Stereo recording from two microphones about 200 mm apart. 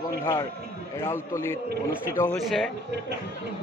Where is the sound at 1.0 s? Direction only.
10° left (ahead or behind).